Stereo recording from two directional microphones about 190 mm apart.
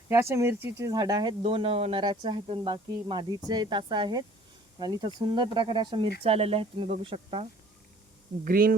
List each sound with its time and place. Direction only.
0.1 s speech: 15° right (ahead or behind); by 7.4 s 30° right (ahead or behind)
8.4 s speech: 50° right (ahead or behind)